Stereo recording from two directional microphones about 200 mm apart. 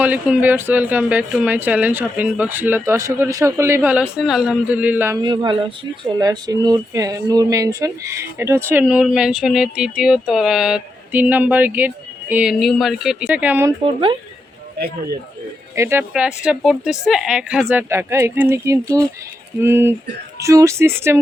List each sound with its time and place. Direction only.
0.0 s speech: 10° right (ahead or behind)
5.2 s a woman's voice: 25° right (ahead or behind)
13.8 s speech: 25° right (ahead or behind)
15.7 s a woman's voice: 15° right (ahead or behind)